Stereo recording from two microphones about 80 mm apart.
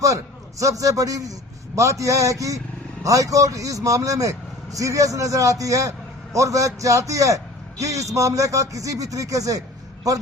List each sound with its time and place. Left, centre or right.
0.6 s a man's voice: right